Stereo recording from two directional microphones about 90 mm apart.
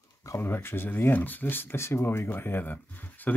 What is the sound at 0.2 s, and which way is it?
Speech, 30° left (ahead or behind).